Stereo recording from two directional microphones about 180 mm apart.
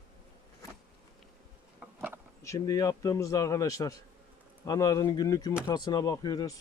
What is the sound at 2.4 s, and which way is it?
A man's voice, 20° left (ahead or behind).